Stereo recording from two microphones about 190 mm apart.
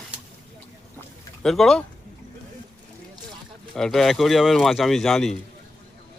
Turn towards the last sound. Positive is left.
turn(degrees=0)  # may be behind; listen again after turning